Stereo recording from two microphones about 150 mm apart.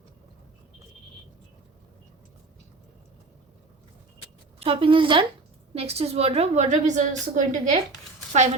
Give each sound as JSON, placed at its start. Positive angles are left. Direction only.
{"t": 4.6, "sound": "a woman's voice", "side_deg": -40}